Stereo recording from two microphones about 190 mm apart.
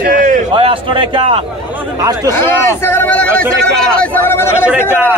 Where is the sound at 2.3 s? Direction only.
15° left (ahead or behind).